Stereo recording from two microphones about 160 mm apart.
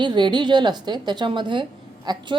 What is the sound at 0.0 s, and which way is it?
A woman's voice, 30° right (ahead or behind).